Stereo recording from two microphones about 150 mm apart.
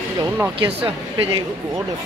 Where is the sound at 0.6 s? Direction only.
40° right (ahead or behind).